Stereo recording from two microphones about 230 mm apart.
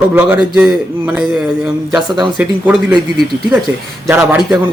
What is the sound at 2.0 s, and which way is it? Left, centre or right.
Speech, centre.